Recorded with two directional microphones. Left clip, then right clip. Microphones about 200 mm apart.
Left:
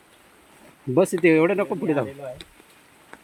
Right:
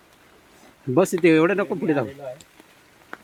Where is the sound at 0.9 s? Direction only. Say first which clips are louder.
Right 1 dB; 15° right (ahead or behind).